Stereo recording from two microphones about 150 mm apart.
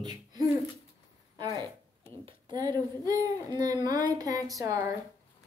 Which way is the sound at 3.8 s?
25° right (ahead or behind).